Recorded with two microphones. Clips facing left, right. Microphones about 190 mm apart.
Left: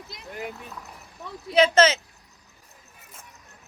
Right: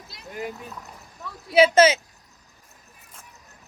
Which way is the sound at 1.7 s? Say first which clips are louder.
Right 2 dB; 10° right (ahead or behind).